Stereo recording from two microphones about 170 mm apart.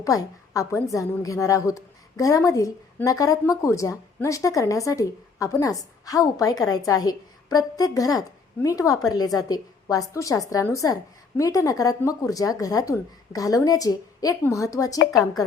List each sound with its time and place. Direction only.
0.0 s a woman's voice: 20° left (ahead or behind)